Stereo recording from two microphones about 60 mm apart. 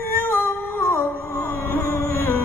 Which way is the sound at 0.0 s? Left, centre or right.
Left.